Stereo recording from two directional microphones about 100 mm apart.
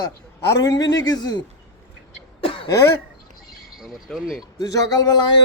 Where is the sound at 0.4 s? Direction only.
35° left (ahead or behind).